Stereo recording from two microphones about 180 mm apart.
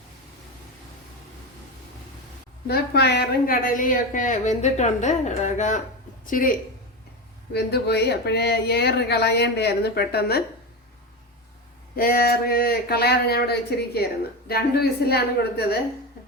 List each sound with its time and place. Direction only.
2.6 s a woman's voice: 65° left (ahead or behind); by 6.5 s 50° left (ahead or behind)
7.5 s speech: 65° left (ahead or behind)
11.9 s speech: 55° left (ahead or behind)